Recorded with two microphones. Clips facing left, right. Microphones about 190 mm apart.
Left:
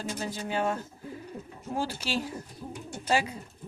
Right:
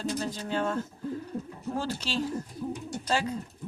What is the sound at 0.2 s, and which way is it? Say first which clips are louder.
Speech: even; 10° left (ahead or behind).